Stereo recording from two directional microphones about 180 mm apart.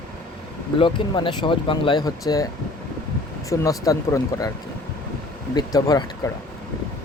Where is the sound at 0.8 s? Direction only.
25° left (ahead or behind).